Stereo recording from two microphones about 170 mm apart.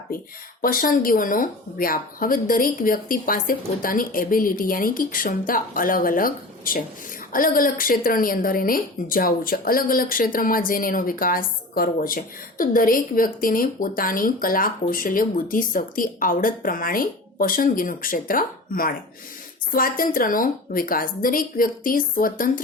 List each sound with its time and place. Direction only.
0.6 s speech: 55° left (ahead or behind)